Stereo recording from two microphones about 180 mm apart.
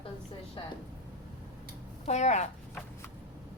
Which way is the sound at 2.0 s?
40° left (ahead or behind).